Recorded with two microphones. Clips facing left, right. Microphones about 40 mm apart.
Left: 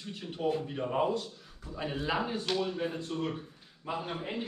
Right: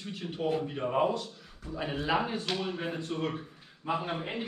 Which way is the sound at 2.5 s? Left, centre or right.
Right.